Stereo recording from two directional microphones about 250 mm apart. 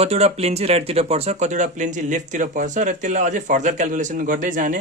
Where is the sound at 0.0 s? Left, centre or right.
Right.